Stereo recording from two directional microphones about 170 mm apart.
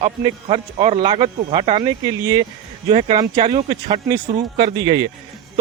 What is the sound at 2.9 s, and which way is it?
Speech, 35° right (ahead or behind).